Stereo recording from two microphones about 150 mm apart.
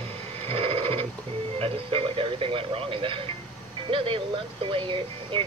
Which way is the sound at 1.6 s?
35° right (ahead or behind).